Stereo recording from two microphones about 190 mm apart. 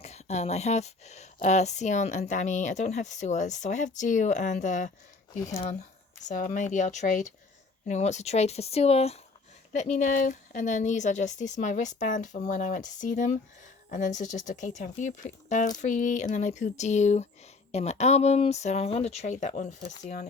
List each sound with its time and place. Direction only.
0.0 s speech: 35° left (ahead or behind)
6.2 s speech: 45° left (ahead or behind)